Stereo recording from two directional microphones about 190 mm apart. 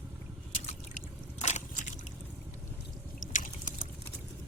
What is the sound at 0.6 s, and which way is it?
Liquid, 35° left (ahead or behind).